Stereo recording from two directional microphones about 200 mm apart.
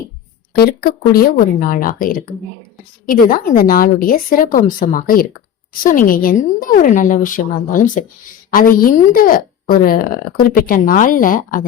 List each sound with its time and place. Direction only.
0.5 s a woman's voice: 50° left (ahead or behind)